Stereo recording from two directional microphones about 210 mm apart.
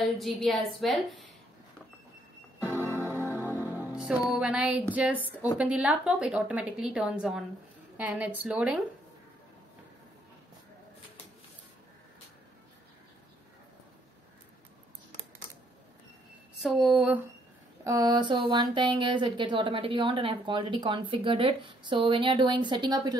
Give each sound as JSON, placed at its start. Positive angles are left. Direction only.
{"t": 0.0, "sound": "a woman's voice", "side_deg": 0}
{"t": 2.6, "sound": "music", "side_deg": -10}
{"t": 4.3, "sound": "a woman's voice", "side_deg": -5}
{"t": 16.5, "sound": "a woman's voice", "side_deg": 0}
{"t": 17.8, "sound": "speech", "side_deg": -15}